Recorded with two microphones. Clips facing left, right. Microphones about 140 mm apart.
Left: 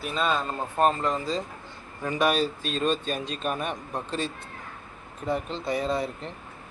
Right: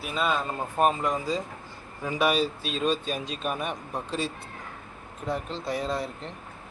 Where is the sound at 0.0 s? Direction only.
5° right (ahead or behind).